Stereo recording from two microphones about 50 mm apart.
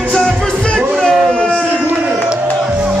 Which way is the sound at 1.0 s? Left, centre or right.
Centre.